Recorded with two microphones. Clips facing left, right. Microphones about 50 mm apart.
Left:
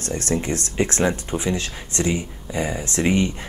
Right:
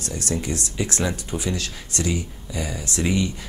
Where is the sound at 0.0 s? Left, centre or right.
Left.